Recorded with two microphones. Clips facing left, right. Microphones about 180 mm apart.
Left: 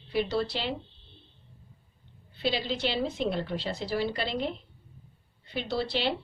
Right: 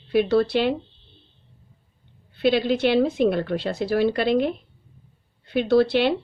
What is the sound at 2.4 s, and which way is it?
A woman's voice, 60° right (ahead or behind).